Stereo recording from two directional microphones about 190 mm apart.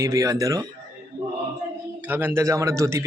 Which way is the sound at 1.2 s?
15° right (ahead or behind).